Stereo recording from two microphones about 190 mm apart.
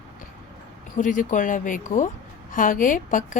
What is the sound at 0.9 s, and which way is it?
A woman's voice, 45° left (ahead or behind).